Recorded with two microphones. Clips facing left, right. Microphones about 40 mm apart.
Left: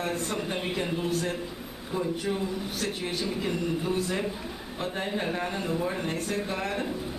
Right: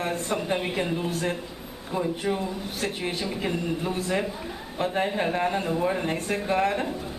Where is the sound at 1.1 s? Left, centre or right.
Right.